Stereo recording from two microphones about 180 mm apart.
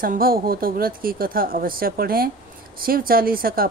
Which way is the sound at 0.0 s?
55° right (ahead or behind).